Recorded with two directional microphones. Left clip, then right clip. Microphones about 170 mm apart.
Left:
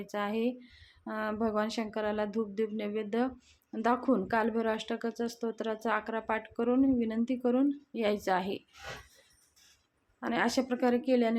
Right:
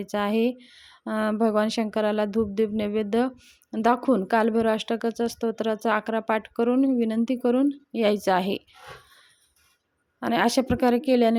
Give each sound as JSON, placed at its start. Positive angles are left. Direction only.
{"t": 0.0, "sound": "speech", "side_deg": -45}
{"t": 10.2, "sound": "speech", "side_deg": -50}